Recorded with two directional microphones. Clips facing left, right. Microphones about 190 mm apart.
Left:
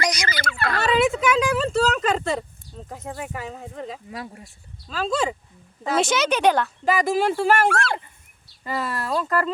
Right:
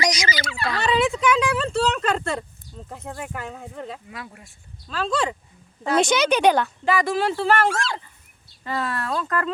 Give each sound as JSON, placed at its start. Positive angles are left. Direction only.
{"t": 0.1, "sound": "fowl", "side_deg": 55}
{"t": 0.8, "sound": "a sound", "side_deg": 5}
{"t": 4.1, "sound": "speech", "side_deg": 35}
{"t": 4.9, "sound": "speech", "side_deg": 5}
{"t": 7.1, "sound": "speech", "side_deg": 10}
{"t": 7.7, "sound": "speech", "side_deg": 60}
{"t": 8.6, "sound": "speech", "side_deg": 5}